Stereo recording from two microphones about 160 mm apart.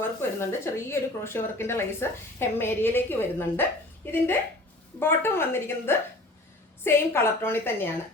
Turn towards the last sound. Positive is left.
turn(degrees=15)  # may be behind; listen again after turning